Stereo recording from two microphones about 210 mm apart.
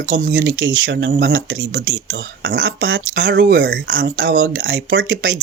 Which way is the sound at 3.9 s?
45° right (ahead or behind).